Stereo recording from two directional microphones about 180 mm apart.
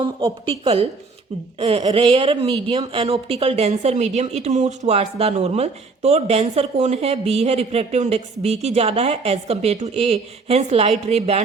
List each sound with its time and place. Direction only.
0.0 s a woman's voice: 25° right (ahead or behind)